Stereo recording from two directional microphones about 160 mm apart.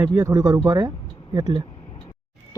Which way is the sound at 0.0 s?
20° right (ahead or behind).